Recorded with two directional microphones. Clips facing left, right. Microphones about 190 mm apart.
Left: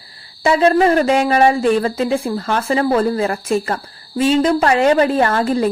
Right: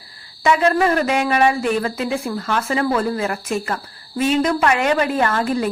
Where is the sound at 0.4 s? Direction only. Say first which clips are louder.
Left 4 dB; 30° left (ahead or behind).